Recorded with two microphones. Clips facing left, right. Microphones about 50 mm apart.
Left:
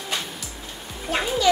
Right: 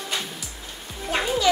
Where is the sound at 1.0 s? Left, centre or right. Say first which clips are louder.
Left 1 dB; centre.